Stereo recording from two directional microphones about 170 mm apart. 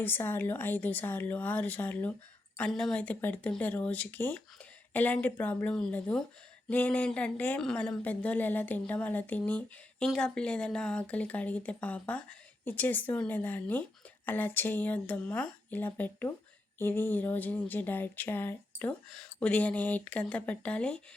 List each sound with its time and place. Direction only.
0.0 s a woman's voice: 10° left (ahead or behind)